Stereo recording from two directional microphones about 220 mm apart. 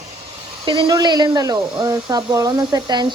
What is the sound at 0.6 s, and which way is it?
Speech, 20° right (ahead or behind).